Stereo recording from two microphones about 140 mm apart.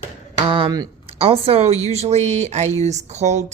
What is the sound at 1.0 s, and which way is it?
Speech, 45° right (ahead or behind).